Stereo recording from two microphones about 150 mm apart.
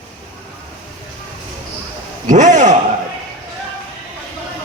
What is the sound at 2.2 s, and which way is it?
Speech, 55° right (ahead or behind).